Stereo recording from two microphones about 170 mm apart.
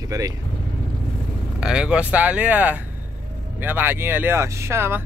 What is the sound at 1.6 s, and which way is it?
Speech, 5° right (ahead or behind).